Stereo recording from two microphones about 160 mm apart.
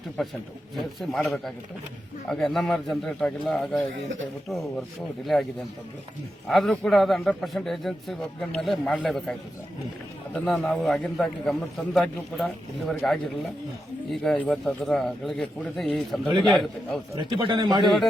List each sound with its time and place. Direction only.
0.9 s a man's voice: centre (ahead or behind)
6.5 s a man's voice: centre (ahead or behind)
10.3 s a man's voice: 5° left (ahead or behind)
17.2 s speech: 30° right (ahead or behind)
17.8 s a man's voice: centre (ahead or behind)